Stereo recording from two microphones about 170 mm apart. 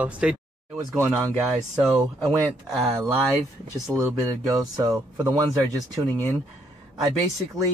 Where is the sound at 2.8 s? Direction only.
20° right (ahead or behind).